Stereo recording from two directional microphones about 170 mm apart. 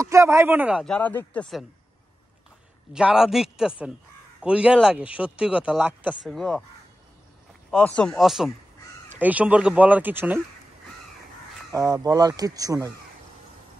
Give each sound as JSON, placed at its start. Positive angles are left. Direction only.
{"t": 0.0, "sound": "speech", "side_deg": -20}
{"t": 0.8, "sound": "speech", "side_deg": 10}
{"t": 2.9, "sound": "speech", "side_deg": -5}
{"t": 6.2, "sound": "speech", "side_deg": 5}
{"t": 7.7, "sound": "speech", "side_deg": 5}
{"t": 11.7, "sound": "speech", "side_deg": -20}